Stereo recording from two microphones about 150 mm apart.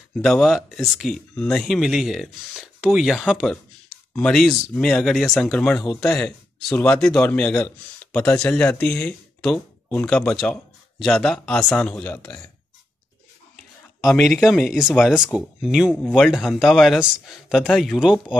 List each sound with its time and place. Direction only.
0.1 s speech: centre (ahead or behind)
11.9 s speech: 15° left (ahead or behind)
14.0 s speech: centre (ahead or behind)